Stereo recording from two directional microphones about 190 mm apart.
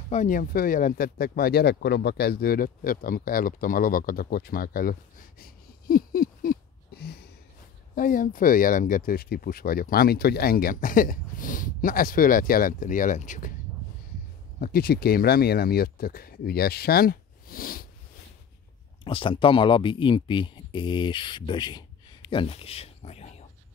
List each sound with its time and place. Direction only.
0.1 s speech: 40° left (ahead or behind)
5.4 s a sound: 50° left (ahead or behind)
7.9 s speech: 45° left (ahead or behind)
14.6 s speech: 50° left (ahead or behind)
19.0 s speech: 25° left (ahead or behind)